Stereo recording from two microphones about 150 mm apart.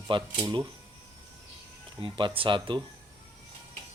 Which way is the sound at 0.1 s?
30° right (ahead or behind).